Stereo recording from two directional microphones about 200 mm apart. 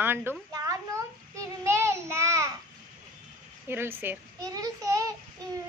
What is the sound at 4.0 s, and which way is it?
Child singing, 15° right (ahead or behind).